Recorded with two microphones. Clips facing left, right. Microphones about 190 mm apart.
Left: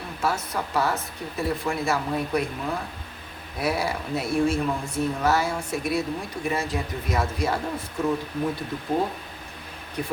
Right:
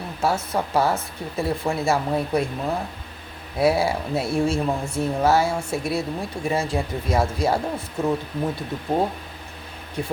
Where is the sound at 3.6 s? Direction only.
25° right (ahead or behind).